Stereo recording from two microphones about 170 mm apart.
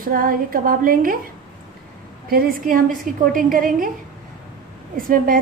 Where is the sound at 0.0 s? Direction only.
55° right (ahead or behind).